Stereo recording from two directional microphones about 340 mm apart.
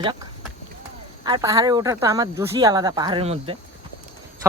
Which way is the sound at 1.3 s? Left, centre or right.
Centre.